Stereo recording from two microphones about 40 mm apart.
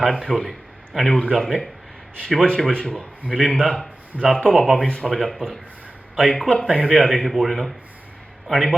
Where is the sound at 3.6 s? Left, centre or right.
Centre.